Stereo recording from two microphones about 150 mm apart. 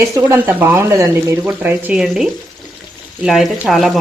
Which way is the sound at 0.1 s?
15° right (ahead or behind).